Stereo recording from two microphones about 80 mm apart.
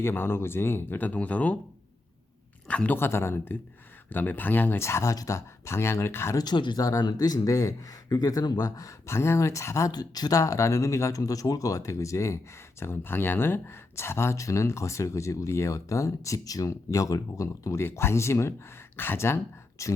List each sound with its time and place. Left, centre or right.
0.0 s speech: left
2.6 s a man's voice: centre
3.0 s speech: left
4.8 s speech: left
6.3 s speech: left
6.8 s speech: left
9.0 s speech: left
9.9 s speech: left